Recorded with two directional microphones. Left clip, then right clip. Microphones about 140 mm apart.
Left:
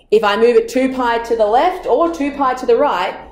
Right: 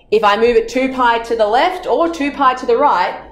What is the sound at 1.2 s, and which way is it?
A woman's voice, 5° left (ahead or behind).